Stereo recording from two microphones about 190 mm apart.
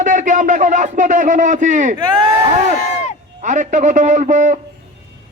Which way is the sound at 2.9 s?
35° left (ahead or behind).